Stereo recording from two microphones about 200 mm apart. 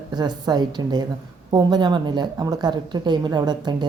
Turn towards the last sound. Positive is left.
turn(degrees=-20)  # may be behind; listen again after turning